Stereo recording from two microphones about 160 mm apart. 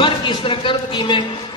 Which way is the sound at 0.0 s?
30° left (ahead or behind).